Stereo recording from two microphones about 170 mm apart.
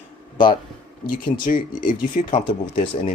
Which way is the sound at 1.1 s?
50° left (ahead or behind).